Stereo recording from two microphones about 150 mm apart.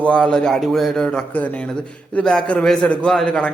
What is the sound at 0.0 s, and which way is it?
A man's voice, 5° left (ahead or behind).